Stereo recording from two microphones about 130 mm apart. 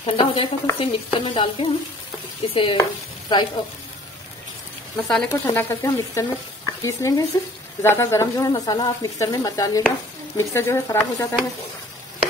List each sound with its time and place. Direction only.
0.0 s a woman's voice: 45° left (ahead or behind)
2.8 s stir: 35° left (ahead or behind)
5.0 s speech: 5° left (ahead or behind)
5.3 s speech: 20° left (ahead or behind)